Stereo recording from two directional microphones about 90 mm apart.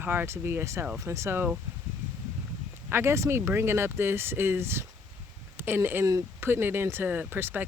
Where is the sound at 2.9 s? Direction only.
30° right (ahead or behind).